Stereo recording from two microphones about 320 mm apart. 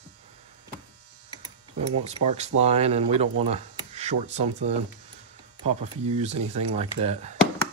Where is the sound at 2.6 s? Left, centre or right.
Centre.